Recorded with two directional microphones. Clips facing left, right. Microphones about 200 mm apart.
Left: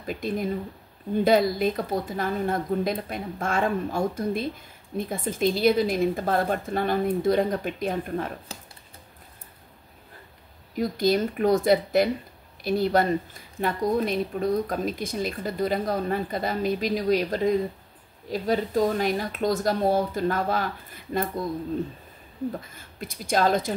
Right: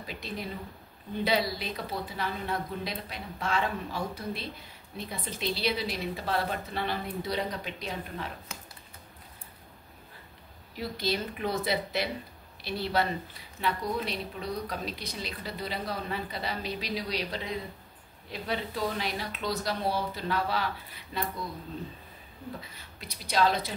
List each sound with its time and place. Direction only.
0.0 s a woman's voice: 50° left (ahead or behind)
8.5 s speech: 35° left (ahead or behind)
10.8 s a woman's voice: 50° left (ahead or behind)
22.6 s a woman's voice: 50° left (ahead or behind)